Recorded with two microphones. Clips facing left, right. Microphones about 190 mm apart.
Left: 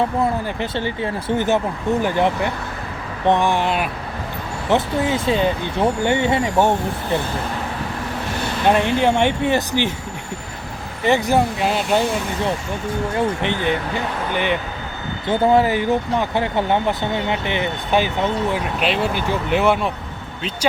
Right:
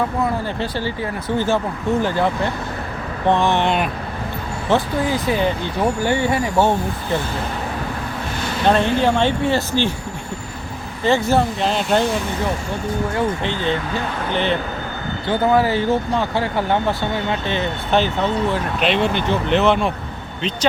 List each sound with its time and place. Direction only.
0.4 s speech: 20° left (ahead or behind)
4.7 s speech: 25° left (ahead or behind)
8.6 s speech: 15° left (ahead or behind)
11.0 s speech: 15° left (ahead or behind)
13.4 s speech: 15° left (ahead or behind)